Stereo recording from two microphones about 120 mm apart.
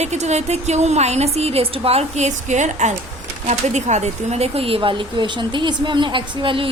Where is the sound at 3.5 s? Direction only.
70° right (ahead or behind); by 6.6 s 45° right (ahead or behind).